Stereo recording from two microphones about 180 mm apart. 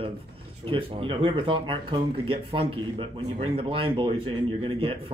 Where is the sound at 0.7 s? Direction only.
30° right (ahead or behind).